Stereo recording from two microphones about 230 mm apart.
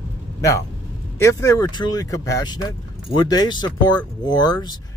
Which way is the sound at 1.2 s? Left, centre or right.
Centre.